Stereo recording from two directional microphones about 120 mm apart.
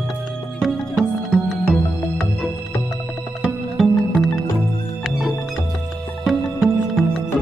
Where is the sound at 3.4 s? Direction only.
Centre (ahead or behind).